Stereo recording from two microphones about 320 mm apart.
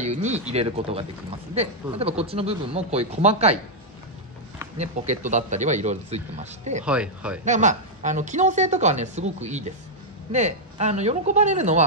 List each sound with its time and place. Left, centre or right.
0.0 s a woman's voice: right
4.7 s a woman's voice: right
6.8 s speech: centre
7.4 s a woman's voice: right